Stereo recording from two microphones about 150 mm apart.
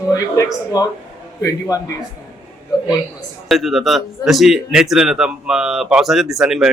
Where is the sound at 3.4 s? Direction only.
Centre (ahead or behind).